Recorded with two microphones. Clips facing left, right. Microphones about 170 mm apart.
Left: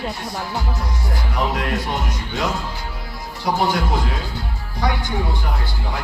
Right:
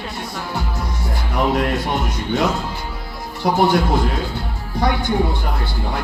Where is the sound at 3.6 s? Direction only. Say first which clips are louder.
Right 6 dB; 60° right (ahead or behind).